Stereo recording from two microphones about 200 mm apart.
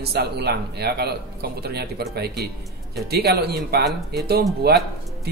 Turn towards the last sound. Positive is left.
turn(degrees=-55)  # may be behind; listen again after turning